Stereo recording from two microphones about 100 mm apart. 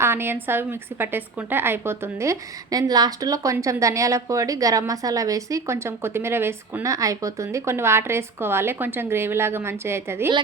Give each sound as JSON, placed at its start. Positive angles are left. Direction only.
{"t": 0.0, "sound": "a woman's voice", "side_deg": -25}